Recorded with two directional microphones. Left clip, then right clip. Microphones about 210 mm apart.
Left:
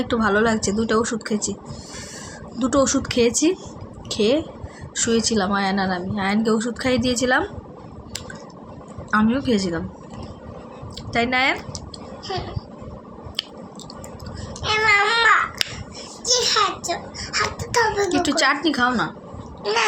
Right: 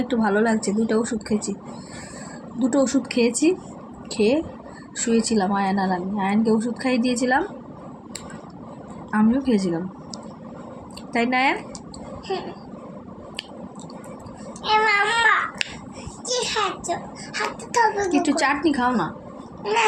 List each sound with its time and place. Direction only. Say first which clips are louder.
0.0 s speech: left 2 dB; 10° left (ahead or behind)
2.6 s speech: left 2 dB; 15° left (ahead or behind)
4.9 s speech: left 1 dB; 10° left (ahead or behind)
9.0 s speech: left 2 dB; 10° left (ahead or behind)
11.1 s a woman's voice: left 1 dB; centre (ahead or behind)
12.3 s speech: even; 20° left (ahead or behind)
14.6 s a sound: left 1 dB; 15° left (ahead or behind)
16.3 s a child's voice: left 5 dB; 15° left (ahead or behind)
18.1 s a woman's voice: left 2 dB; 5° left (ahead or behind)